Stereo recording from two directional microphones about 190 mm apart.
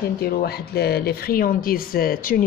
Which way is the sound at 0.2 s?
55° left (ahead or behind).